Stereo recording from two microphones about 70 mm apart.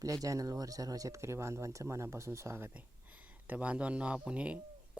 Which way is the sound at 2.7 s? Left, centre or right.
Right.